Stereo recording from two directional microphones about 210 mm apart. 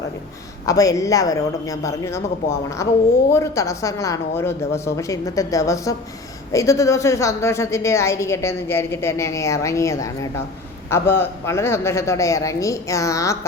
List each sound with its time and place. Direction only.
0.6 s a woman's voice: 15° left (ahead or behind)